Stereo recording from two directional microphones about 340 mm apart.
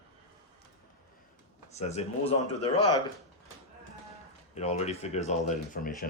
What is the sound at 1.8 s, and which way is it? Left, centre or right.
Speech, centre.